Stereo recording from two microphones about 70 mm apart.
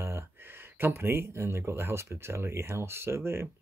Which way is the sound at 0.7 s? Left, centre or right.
Right.